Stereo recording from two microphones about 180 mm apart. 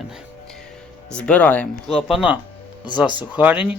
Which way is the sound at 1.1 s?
5° left (ahead or behind).